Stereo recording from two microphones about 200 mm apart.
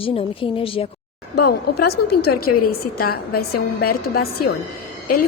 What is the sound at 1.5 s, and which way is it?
A woman's voice, 50° left (ahead or behind).